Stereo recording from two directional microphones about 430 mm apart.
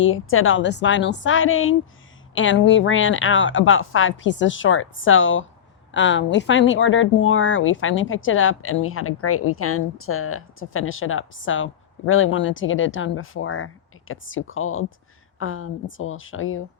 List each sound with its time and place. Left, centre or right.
0.0 s speech: left